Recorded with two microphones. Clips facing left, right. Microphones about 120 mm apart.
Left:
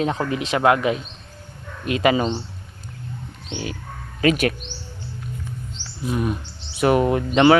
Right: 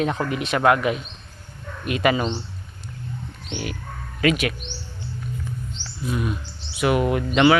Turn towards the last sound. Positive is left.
turn(degrees=35)  # may be behind; listen again after turning